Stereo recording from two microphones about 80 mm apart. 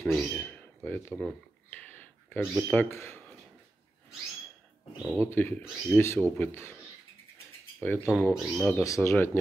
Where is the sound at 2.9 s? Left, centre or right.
Left.